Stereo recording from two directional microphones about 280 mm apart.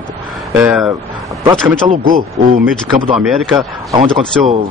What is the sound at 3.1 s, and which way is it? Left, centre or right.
Speech, centre.